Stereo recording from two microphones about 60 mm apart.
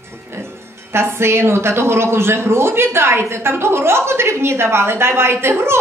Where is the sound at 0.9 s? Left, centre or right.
Right.